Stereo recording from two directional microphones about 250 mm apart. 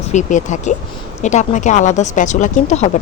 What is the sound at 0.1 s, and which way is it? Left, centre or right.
Speech, left.